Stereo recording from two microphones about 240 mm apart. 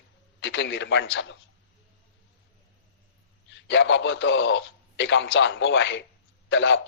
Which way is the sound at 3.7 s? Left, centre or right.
Left.